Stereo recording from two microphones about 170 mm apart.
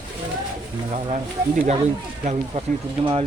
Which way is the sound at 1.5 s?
40° right (ahead or behind).